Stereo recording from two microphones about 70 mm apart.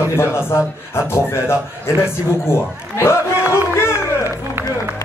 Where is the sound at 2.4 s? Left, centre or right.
Left.